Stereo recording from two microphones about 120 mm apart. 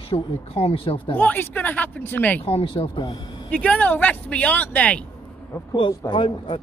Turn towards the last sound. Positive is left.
turn(degrees=45)  # may be behind; listen again after turning